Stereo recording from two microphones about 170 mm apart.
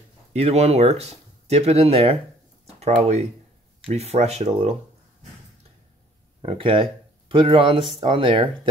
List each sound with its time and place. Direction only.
0.3 s speech: 40° right (ahead or behind)
6.4 s speech: 35° right (ahead or behind)